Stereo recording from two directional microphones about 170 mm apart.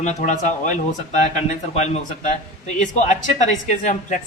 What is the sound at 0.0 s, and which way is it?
A woman's voice, 45° left (ahead or behind).